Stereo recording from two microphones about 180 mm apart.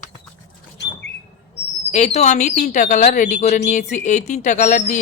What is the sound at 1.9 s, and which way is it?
Speech, 40° left (ahead or behind).